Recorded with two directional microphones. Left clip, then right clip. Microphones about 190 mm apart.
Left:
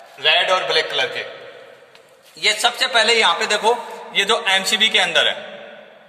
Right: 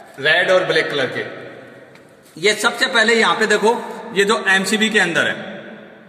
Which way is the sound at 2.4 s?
40° left (ahead or behind).